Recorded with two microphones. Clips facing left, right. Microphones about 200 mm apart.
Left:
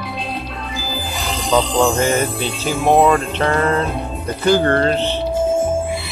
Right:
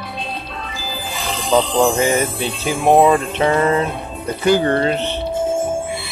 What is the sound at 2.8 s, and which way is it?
Speech, 15° right (ahead or behind).